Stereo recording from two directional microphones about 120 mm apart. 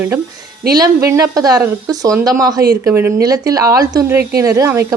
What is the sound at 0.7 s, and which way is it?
A woman's voice, 30° right (ahead or behind).